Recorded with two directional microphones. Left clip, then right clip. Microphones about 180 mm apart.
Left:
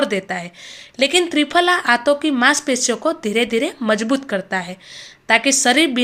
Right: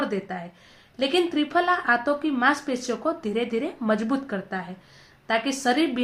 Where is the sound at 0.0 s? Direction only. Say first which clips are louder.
Left 8 dB; 35° left (ahead or behind).